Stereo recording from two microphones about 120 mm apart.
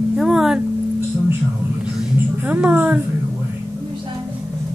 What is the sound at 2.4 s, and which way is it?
Speech, 10° right (ahead or behind).